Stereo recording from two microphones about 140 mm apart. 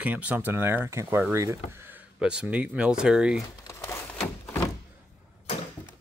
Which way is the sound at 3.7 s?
15° left (ahead or behind).